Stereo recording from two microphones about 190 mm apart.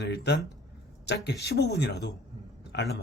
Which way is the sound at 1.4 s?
60° left (ahead or behind).